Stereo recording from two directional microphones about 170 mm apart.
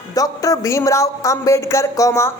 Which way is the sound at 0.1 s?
20° left (ahead or behind).